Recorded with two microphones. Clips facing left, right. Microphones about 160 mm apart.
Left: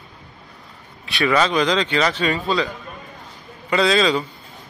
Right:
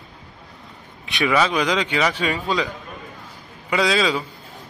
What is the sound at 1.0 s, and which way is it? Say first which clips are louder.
Speech: left 1 dB; 15° right (ahead or behind).